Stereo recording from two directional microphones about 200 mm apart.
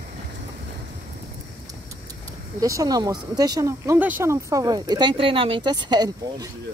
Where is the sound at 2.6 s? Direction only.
15° right (ahead or behind).